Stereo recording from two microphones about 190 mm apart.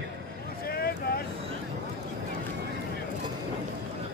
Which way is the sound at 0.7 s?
55° left (ahead or behind).